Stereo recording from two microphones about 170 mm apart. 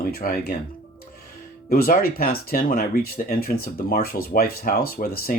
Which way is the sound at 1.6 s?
60° left (ahead or behind).